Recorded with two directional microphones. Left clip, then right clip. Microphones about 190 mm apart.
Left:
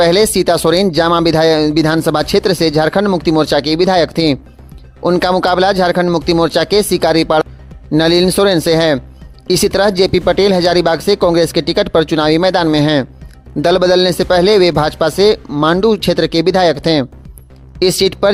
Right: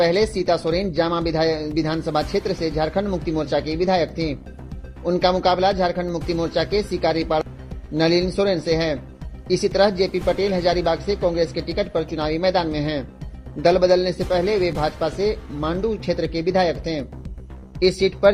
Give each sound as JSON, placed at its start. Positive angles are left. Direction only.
{"t": 0.0, "sound": "speech", "side_deg": 40}